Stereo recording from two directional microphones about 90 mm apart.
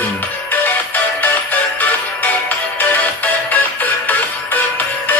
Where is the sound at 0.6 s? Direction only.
20° left (ahead or behind).